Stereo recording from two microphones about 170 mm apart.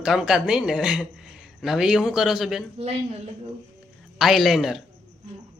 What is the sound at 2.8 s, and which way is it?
Speech, 35° right (ahead or behind).